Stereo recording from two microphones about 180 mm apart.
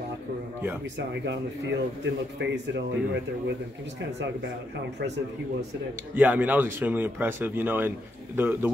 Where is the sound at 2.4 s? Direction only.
70° right (ahead or behind).